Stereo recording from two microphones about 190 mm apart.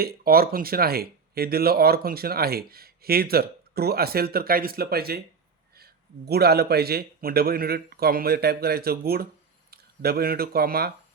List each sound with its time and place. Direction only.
0.0 s a man's voice: 50° right (ahead or behind)